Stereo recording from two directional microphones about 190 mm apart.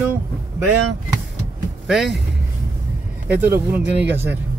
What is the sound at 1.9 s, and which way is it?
Speech, centre (ahead or behind).